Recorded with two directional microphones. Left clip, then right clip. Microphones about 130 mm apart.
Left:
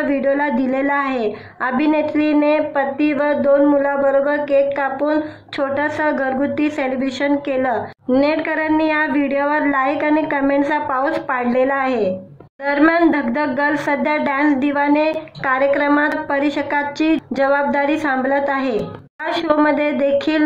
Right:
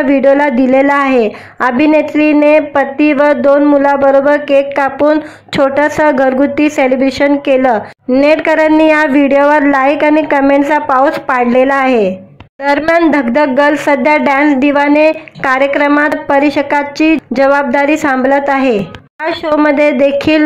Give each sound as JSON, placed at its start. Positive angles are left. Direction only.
{"t": 0.0, "sound": "a woman's voice", "side_deg": -45}